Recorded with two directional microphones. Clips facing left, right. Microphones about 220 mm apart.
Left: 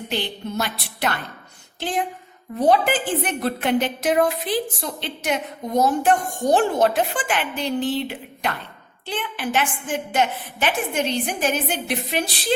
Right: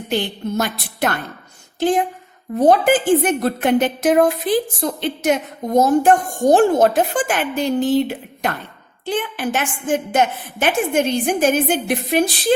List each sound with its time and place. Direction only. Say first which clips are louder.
0.1 s a woman's voice: right 6 dB; 45° right (ahead or behind)